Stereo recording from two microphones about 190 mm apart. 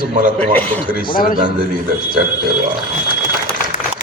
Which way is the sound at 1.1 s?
50° left (ahead or behind).